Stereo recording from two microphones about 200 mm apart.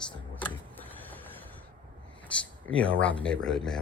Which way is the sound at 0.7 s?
10° left (ahead or behind).